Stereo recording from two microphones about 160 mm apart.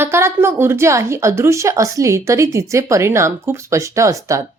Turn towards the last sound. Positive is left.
turn(degrees=-20)  # may be behind; listen again after turning